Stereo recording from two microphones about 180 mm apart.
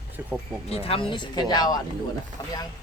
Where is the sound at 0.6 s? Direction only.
35° left (ahead or behind).